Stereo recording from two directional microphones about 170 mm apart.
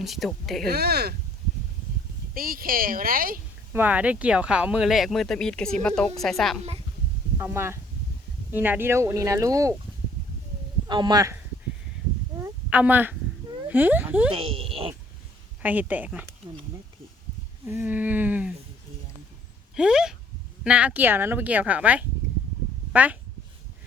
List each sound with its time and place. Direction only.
0.0 s speech: centre (ahead or behind)
0.7 s speech: 65° right (ahead or behind)
2.3 s a woman's voice: 60° right (ahead or behind)
3.7 s speech: 10° right (ahead or behind)
7.3 s speech: 15° right (ahead or behind)
10.8 s speech: 25° right (ahead or behind)
12.4 s a sound: 10° right (ahead or behind)
13.7 s speech: 10° right (ahead or behind)
14.3 s speech: 35° right (ahead or behind)
15.6 s speech: 10° right (ahead or behind)
17.7 s speech: 10° right (ahead or behind)
19.7 s speech: 5° right (ahead or behind)